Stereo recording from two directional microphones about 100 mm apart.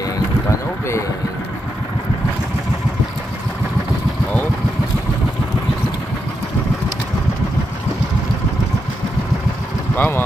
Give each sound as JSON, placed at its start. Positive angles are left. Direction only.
{"t": 0.5, "sound": "vehicle", "side_deg": 30}
{"t": 9.9, "sound": "vehicle", "side_deg": 20}